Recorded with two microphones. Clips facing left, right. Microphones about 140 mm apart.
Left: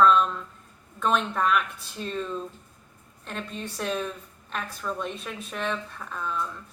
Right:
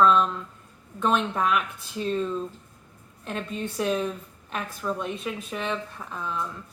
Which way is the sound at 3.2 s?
15° right (ahead or behind).